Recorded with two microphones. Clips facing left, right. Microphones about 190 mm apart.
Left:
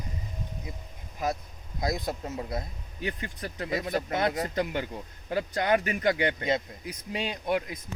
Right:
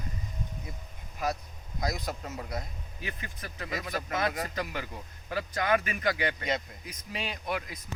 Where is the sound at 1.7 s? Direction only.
25° left (ahead or behind).